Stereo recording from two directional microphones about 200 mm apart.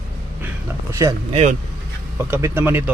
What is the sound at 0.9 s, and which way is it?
Speech, 15° right (ahead or behind).